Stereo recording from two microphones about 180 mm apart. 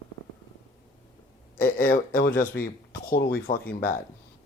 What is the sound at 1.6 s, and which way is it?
Speech, 50° left (ahead or behind).